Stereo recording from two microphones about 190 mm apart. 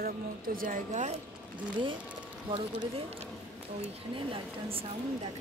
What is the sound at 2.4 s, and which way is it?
Speech, 25° right (ahead or behind).